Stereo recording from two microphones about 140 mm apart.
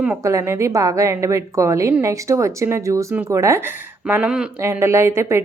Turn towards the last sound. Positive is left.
turn(degrees=-20)  # may be behind; listen again after turning